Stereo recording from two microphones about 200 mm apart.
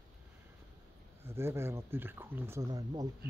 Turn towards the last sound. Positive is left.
turn(degrees=-20)  # may be behind; listen again after turning